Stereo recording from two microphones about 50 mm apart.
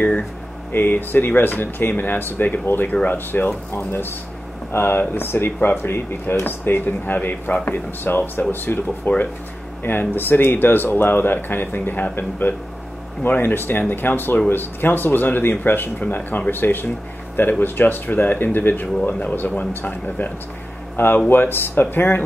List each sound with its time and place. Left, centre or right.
0.7 s speech: left
3.7 s speech: left
5.9 s speech: left
20.9 s speech: left